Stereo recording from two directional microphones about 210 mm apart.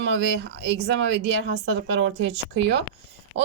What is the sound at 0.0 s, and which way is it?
Speech, 55° right (ahead or behind).